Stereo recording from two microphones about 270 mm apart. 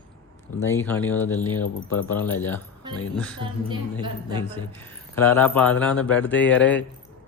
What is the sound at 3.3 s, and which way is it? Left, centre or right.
A woman's voice, centre.